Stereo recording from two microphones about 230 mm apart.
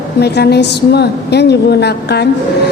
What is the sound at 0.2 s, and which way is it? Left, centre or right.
A woman's voice, left.